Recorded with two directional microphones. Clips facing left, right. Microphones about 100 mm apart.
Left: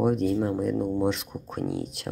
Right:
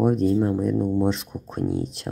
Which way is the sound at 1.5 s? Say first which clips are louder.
Right 4 dB; 30° right (ahead or behind).